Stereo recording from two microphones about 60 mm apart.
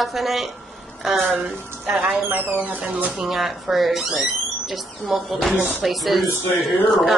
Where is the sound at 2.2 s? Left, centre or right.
Right.